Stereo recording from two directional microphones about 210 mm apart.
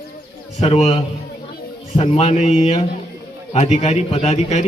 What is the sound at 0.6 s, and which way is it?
A man's voice, 30° left (ahead or behind).